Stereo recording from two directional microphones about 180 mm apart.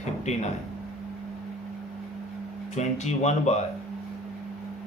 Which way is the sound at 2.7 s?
40° left (ahead or behind).